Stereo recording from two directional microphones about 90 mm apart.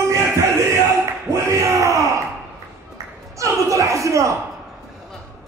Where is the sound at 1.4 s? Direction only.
35° right (ahead or behind).